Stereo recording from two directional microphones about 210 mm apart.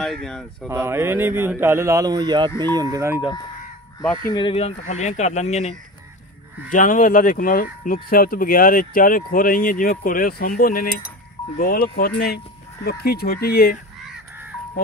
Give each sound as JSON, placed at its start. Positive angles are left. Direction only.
{"t": 0.0, "sound": "speech", "side_deg": 0}
{"t": 0.7, "sound": "speech", "side_deg": -10}
{"t": 4.3, "sound": "speech", "side_deg": 25}